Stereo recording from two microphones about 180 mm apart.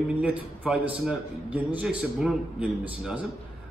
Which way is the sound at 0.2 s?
5° right (ahead or behind).